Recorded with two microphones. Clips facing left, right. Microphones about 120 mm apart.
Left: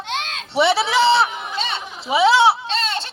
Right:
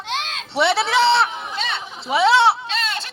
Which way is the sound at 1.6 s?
25° left (ahead or behind).